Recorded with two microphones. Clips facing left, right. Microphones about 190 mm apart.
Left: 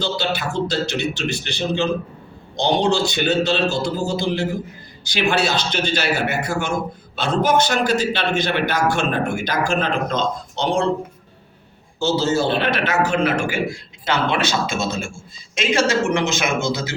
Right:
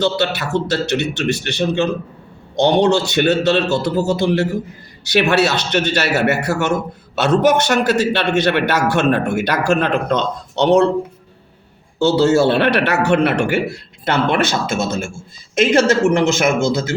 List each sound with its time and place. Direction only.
0.0 s a man's voice: 65° right (ahead or behind)
12.0 s a man's voice: 65° right (ahead or behind)